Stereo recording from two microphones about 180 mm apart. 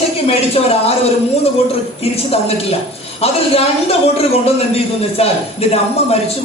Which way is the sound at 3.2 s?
35° left (ahead or behind).